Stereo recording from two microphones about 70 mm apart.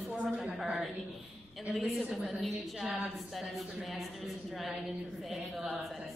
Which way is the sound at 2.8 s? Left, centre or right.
Centre.